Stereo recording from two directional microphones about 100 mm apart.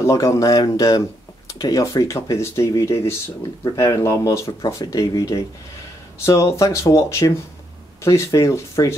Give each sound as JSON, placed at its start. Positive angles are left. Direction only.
{"t": 0.0, "sound": "speech", "side_deg": 30}